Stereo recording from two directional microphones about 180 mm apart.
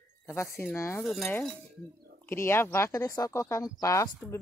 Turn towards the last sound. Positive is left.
turn(degrees=20)  # may be behind; listen again after turning